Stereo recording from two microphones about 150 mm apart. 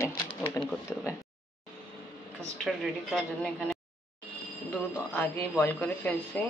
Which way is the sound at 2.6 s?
Centre (ahead or behind).